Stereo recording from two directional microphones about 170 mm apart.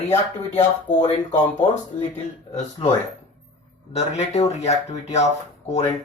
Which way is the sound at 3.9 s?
40° left (ahead or behind).